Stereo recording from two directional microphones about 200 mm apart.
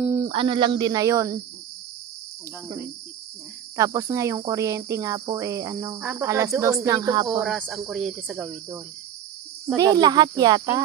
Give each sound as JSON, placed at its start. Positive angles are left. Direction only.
{"t": 0.1, "sound": "speech", "side_deg": -25}
{"t": 3.7, "sound": "speech", "side_deg": -15}
{"t": 7.2, "sound": "speech", "side_deg": -5}
{"t": 9.8, "sound": "speech", "side_deg": -20}